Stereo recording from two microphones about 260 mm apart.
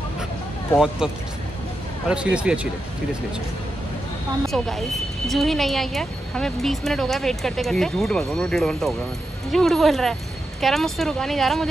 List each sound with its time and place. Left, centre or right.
0.7 s speech: centre
2.3 s speech: centre
4.5 s speech: centre